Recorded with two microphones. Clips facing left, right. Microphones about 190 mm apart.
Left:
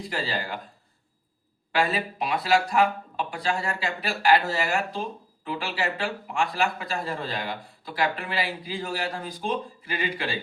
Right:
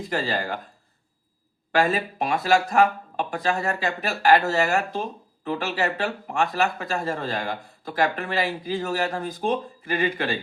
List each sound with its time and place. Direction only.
0.1 s speech: 45° right (ahead or behind)
1.7 s speech: 45° right (ahead or behind)